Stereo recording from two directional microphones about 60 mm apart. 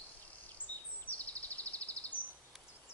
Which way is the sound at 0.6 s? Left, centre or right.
Right.